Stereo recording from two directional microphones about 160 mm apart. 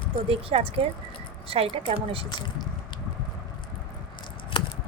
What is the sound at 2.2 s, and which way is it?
Speech, 25° left (ahead or behind).